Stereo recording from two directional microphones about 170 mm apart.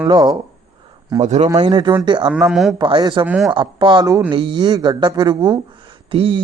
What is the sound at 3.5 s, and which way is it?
Speech, 25° right (ahead or behind).